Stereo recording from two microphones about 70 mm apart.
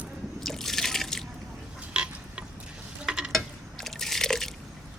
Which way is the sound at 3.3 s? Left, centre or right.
Centre.